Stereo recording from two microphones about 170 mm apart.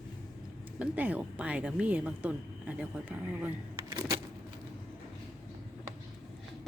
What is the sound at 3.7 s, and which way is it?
Vehicle, 20° right (ahead or behind).